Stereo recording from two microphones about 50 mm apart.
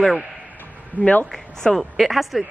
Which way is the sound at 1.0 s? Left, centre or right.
Right.